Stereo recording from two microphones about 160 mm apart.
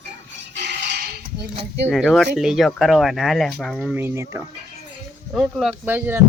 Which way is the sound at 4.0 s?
15° right (ahead or behind).